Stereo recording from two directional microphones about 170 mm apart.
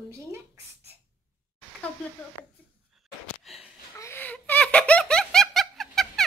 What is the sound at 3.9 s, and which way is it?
Giggle, 15° left (ahead or behind).